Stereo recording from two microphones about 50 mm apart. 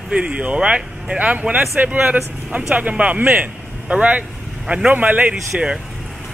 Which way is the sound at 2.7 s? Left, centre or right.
Right.